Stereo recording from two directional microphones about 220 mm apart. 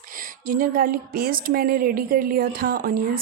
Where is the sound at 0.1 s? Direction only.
40° right (ahead or behind).